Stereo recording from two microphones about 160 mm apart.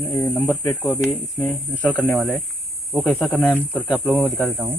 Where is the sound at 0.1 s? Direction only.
10° left (ahead or behind); by 4.7 s 10° right (ahead or behind).